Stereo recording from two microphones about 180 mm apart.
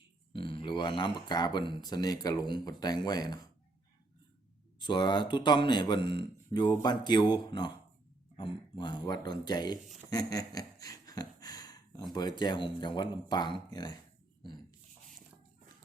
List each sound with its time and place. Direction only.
0.3 s speech: 30° left (ahead or behind)
4.8 s speech: 25° left (ahead or behind)
10.1 s a sound: 20° left (ahead or behind)
12.1 s speech: 25° left (ahead or behind)